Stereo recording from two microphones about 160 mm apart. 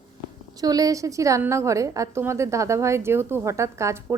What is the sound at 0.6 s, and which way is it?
A woman's voice, 25° right (ahead or behind).